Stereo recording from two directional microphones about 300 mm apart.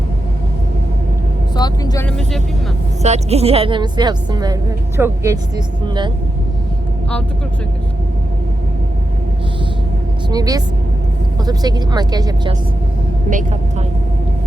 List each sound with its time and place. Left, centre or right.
1.5 s vehicle: centre
3.0 s a woman's voice: right
10.2 s a woman's voice: centre